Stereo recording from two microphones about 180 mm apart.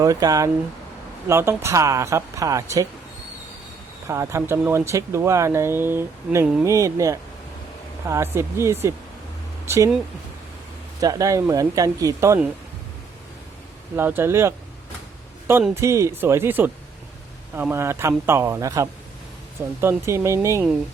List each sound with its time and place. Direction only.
0.0 s speech: 20° right (ahead or behind)
4.1 s speech: 15° right (ahead or behind)
11.0 s speech: 20° right (ahead or behind)
13.9 s speech: 10° right (ahead or behind)
15.7 s speech: 15° right (ahead or behind)